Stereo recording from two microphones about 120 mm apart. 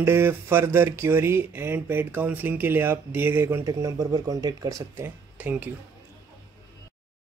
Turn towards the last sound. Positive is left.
turn(degrees=-15)  # may be behind; listen again after turning